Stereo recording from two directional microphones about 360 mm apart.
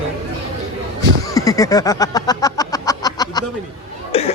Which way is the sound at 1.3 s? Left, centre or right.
Centre.